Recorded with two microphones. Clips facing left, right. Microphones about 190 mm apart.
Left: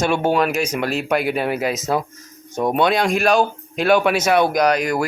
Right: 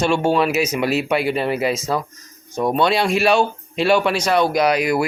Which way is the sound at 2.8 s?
Centre (ahead or behind).